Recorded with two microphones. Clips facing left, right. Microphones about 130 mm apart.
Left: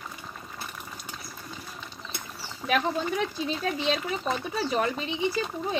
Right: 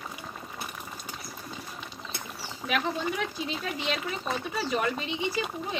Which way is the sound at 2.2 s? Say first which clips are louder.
Right 1 dB; 15° right (ahead or behind).